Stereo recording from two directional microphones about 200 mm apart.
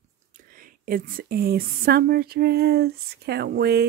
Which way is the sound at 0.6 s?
45° right (ahead or behind).